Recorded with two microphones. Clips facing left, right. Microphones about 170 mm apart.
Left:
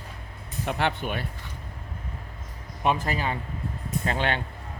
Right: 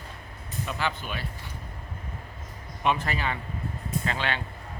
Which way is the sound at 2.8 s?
40° left (ahead or behind).